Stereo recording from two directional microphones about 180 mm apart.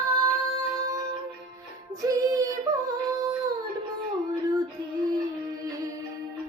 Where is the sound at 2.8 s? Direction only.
20° right (ahead or behind).